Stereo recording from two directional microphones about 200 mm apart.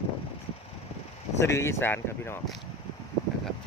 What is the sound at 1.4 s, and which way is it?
Speech, 15° left (ahead or behind).